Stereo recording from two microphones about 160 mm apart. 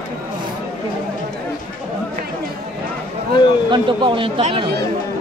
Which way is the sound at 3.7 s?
30° right (ahead or behind).